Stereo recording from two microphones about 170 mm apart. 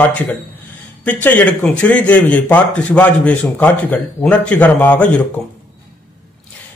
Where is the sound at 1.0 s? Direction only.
10° left (ahead or behind).